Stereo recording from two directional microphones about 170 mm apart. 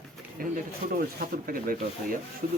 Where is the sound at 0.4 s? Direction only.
60° right (ahead or behind).